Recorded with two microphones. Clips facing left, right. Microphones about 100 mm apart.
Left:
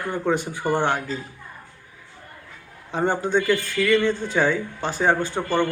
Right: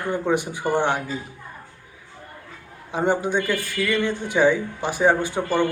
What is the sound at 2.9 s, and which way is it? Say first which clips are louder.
Speech: even; 15° right (ahead or behind).